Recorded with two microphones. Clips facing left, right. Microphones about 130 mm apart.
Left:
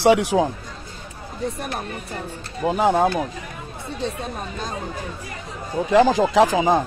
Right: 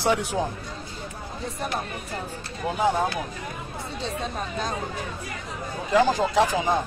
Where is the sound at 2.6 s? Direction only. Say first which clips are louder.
Left 7 dB; 90° left.